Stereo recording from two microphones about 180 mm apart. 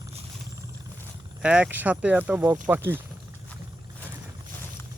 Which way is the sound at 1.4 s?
5° right (ahead or behind).